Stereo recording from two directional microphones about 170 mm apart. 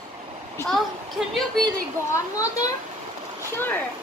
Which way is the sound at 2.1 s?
20° left (ahead or behind).